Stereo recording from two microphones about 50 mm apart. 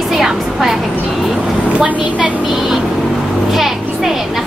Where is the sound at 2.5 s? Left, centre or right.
Centre.